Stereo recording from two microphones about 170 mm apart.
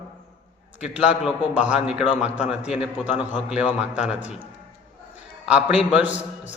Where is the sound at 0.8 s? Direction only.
5° right (ahead or behind).